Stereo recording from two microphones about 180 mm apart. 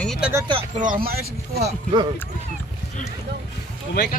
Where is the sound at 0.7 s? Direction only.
50° right (ahead or behind).